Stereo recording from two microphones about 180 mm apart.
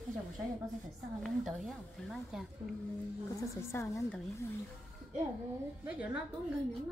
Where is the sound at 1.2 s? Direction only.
Centre (ahead or behind).